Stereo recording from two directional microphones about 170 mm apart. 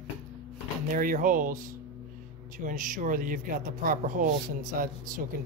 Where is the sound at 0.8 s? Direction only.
55° right (ahead or behind).